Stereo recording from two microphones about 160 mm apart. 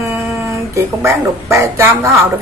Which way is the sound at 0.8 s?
20° right (ahead or behind).